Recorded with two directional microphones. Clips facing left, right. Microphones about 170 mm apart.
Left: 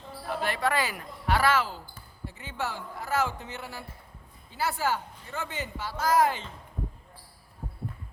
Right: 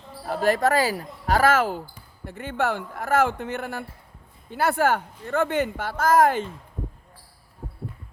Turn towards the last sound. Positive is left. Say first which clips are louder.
# right 6 dB
turn(degrees=-50)  # may be behind; listen again after turning